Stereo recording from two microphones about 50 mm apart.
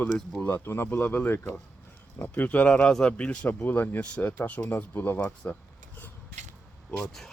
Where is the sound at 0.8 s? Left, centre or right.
Left.